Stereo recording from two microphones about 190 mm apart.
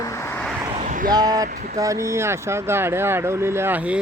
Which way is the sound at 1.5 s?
45° right (ahead or behind).